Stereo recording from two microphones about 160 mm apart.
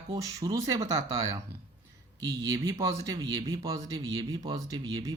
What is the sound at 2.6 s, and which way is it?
Speech, 20° right (ahead or behind).